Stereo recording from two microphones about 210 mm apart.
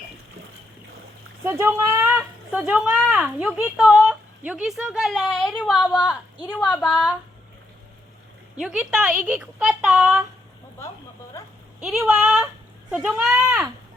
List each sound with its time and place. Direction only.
1.5 s speech: 10° right (ahead or behind)
6.3 s a woman's voice: 20° left (ahead or behind)
6.6 s speech: 5° left (ahead or behind)
8.6 s speech: 5° right (ahead or behind)
11.8 s speech: centre (ahead or behind)